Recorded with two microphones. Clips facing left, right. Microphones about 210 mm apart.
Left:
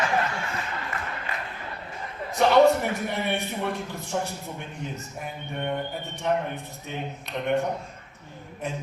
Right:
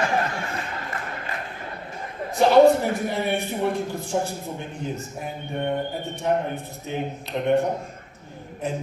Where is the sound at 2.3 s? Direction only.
30° right (ahead or behind).